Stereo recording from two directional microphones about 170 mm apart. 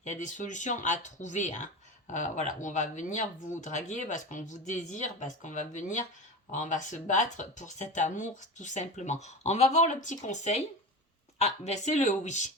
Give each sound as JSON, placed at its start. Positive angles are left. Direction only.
{"t": 0.0, "sound": "speech", "side_deg": 45}